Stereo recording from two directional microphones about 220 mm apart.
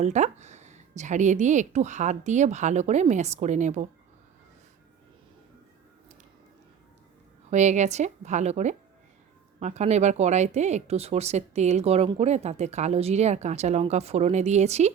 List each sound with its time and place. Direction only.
0.0 s speech: 30° right (ahead or behind)
7.5 s speech: 30° right (ahead or behind)